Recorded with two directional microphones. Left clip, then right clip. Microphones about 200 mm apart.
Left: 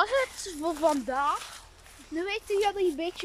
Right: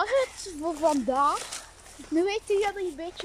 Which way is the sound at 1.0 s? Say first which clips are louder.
Right 4 dB; 20° right (ahead or behind).